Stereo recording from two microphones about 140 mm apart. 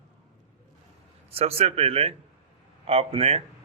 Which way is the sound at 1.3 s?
45° right (ahead or behind).